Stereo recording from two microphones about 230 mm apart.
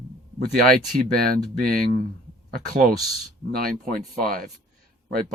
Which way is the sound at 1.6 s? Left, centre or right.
Right.